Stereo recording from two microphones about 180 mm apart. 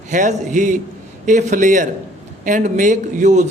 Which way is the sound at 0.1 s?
45° right (ahead or behind).